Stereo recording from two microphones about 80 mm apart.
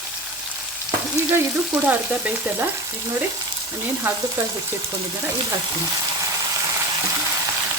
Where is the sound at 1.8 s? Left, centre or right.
Centre.